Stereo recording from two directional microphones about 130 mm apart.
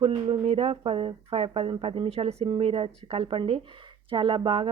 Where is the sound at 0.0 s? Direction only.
45° right (ahead or behind).